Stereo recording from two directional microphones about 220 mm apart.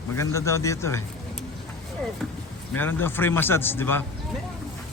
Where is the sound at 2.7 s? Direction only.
10° left (ahead or behind).